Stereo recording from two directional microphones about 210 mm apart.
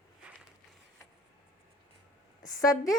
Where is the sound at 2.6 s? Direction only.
15° left (ahead or behind).